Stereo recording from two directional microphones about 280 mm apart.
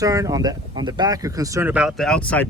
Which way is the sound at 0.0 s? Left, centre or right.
Centre.